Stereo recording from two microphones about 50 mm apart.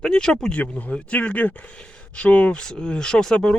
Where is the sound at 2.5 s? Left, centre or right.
Centre.